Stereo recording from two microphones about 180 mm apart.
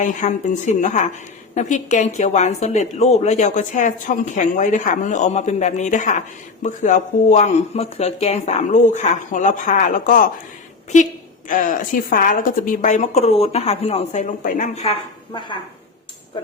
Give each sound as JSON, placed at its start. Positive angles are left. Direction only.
{"t": 0.0, "sound": "a woman's voice", "side_deg": 45}
{"t": 15.3, "sound": "dishes", "side_deg": 25}